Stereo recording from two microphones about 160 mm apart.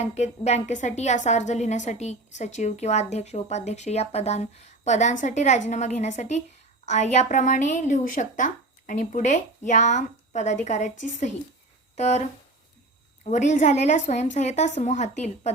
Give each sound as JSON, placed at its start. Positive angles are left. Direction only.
{"t": 0.0, "sound": "a woman's voice", "side_deg": 45}